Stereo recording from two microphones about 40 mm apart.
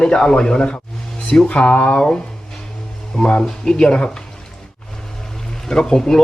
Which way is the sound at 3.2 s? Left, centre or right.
Left.